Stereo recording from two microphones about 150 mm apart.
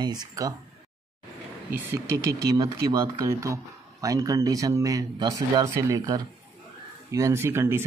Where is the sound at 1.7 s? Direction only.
15° right (ahead or behind).